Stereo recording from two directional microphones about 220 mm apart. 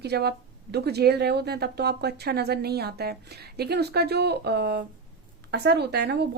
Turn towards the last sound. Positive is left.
turn(degrees=-50)  # may be behind; listen again after turning